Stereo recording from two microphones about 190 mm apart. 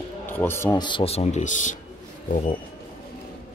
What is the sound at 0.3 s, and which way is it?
Speech, 10° left (ahead or behind).